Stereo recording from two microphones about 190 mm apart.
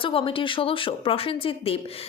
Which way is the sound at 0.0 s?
30° left (ahead or behind).